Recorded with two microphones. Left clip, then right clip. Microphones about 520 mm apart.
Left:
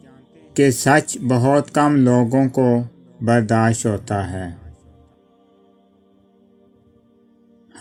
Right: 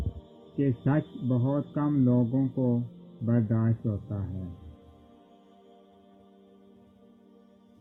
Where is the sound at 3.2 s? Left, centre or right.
Centre.